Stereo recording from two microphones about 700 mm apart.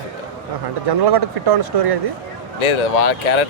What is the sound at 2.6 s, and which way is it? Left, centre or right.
Speech, left.